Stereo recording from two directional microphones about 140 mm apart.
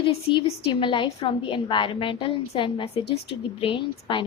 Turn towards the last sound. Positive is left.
turn(degrees=35)  # may be behind; listen again after turning